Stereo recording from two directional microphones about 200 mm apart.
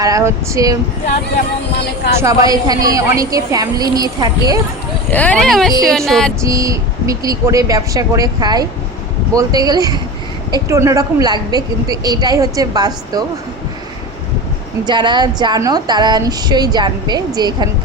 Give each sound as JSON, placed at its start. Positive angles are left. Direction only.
{"t": 0.0, "sound": "a woman's voice", "side_deg": -15}
{"t": 2.2, "sound": "a woman's voice", "side_deg": -20}
{"t": 5.1, "sound": "speech", "side_deg": 5}
{"t": 6.4, "sound": "a woman's voice", "side_deg": -15}
{"t": 14.8, "sound": "speech", "side_deg": -20}